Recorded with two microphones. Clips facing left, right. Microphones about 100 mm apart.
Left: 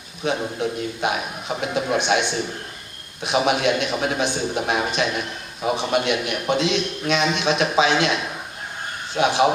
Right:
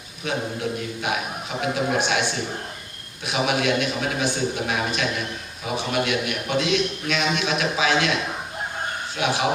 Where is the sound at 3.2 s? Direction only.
25° left (ahead or behind).